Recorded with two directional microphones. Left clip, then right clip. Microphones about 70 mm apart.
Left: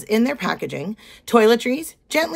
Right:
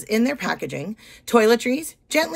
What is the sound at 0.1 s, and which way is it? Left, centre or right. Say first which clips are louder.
Speech: left 2 dB; left.